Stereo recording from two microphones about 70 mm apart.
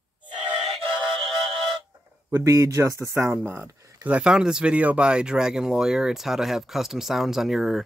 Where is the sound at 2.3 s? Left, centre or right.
Right.